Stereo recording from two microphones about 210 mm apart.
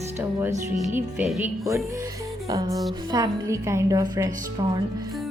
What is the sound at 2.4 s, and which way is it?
Speech, 15° right (ahead or behind).